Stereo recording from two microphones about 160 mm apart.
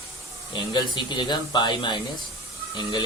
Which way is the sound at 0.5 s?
25° left (ahead or behind).